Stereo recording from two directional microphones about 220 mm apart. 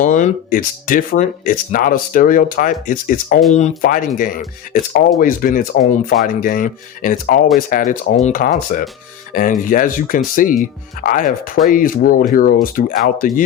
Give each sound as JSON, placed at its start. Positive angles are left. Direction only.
{"t": 0.0, "sound": "speech", "side_deg": 35}